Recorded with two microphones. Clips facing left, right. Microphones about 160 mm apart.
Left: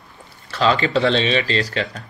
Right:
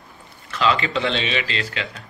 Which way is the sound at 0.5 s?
35° left (ahead or behind).